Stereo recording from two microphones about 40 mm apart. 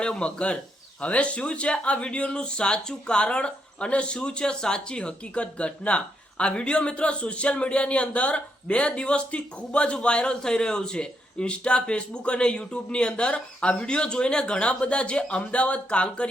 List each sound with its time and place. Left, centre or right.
0.0 s speech: left